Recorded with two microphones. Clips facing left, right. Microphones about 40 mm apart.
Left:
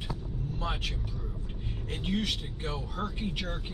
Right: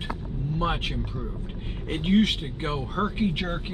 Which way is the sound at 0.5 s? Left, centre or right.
Right.